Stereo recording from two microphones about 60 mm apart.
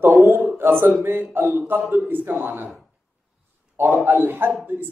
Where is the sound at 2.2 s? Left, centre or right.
Right.